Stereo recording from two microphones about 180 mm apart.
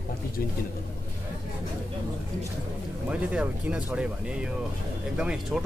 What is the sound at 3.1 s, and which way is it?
Speech, 5° right (ahead or behind).